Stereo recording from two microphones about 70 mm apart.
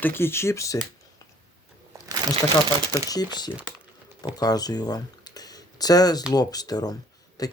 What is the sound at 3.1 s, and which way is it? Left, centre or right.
Speech, left.